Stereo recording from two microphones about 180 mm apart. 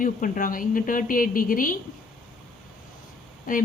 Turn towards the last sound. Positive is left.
turn(degrees=50)  # may be behind; listen again after turning